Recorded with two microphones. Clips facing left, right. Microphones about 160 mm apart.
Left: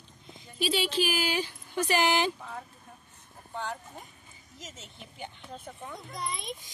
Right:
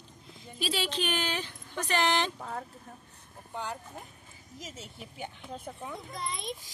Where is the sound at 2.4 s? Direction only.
45° right (ahead or behind).